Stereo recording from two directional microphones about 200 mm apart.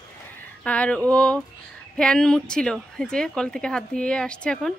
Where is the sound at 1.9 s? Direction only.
5° left (ahead or behind).